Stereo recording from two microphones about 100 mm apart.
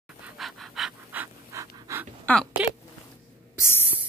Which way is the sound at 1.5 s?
30° right (ahead or behind).